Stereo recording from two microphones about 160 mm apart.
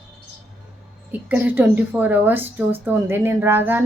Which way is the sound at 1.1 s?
10° right (ahead or behind).